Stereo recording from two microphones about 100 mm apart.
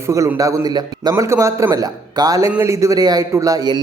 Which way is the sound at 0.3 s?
35° right (ahead or behind).